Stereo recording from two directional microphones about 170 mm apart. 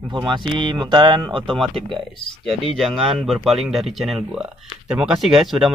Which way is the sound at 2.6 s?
Centre (ahead or behind).